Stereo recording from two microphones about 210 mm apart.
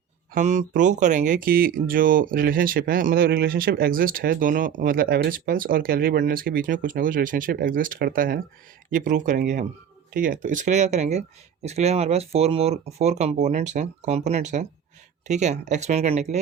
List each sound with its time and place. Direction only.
0.3 s speech: 35° right (ahead or behind)